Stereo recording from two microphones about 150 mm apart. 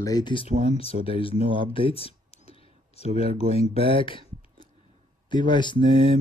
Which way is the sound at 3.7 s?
35° left (ahead or behind).